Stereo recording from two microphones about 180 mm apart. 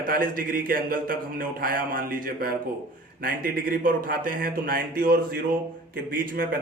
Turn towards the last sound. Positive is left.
turn(degrees=-50)  # may be behind; listen again after turning